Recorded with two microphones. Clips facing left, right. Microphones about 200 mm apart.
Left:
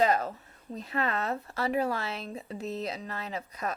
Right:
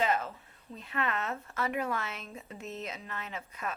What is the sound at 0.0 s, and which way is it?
Speech, 40° left (ahead or behind).